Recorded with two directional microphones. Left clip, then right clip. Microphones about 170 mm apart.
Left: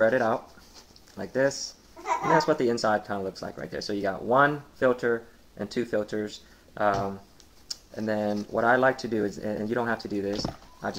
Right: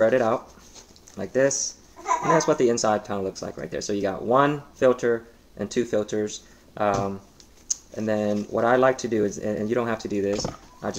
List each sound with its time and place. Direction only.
0.0 s speech: 20° right (ahead or behind)